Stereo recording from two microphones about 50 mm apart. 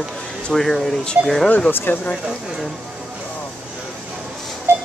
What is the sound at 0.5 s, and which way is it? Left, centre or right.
Speech, centre.